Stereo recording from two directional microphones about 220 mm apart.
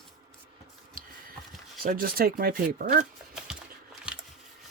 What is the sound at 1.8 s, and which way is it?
Speech, 40° right (ahead or behind).